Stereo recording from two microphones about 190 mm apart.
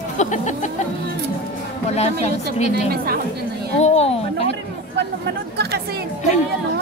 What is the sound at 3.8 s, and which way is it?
Speech, 35° left (ahead or behind).